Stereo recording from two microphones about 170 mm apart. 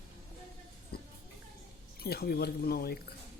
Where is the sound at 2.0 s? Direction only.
65° left (ahead or behind).